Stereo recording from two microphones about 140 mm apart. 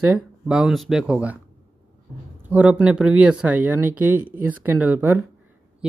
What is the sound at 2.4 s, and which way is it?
Speech, 10° right (ahead or behind).